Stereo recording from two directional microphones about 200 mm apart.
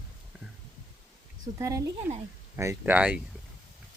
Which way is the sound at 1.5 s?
15° right (ahead or behind).